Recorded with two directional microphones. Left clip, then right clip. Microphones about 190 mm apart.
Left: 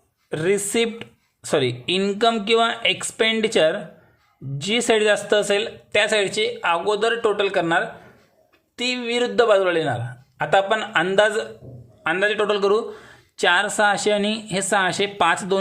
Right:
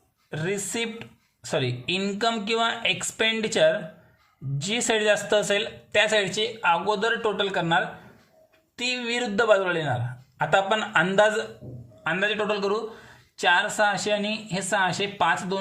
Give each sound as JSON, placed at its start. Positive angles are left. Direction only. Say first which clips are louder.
{"t": 0.3, "sound": "a man's voice", "louder": "left 8 dB", "side_deg": 25}
{"t": 12.0, "sound": "a man's voice", "louder": "left 5 dB", "side_deg": 25}